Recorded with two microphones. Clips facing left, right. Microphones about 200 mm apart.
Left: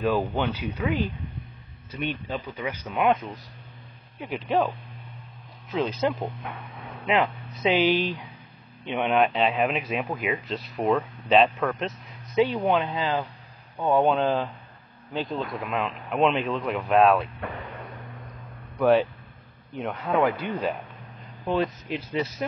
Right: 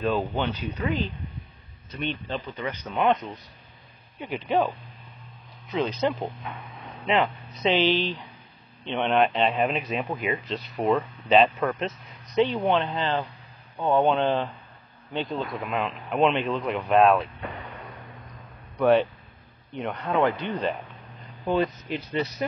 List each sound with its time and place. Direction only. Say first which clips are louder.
0.0 s speech: left 1 dB; 10° left (ahead or behind)
17.7 s vehicle: left 2 dB; centre (ahead or behind)
18.8 s speech: even; centre (ahead or behind)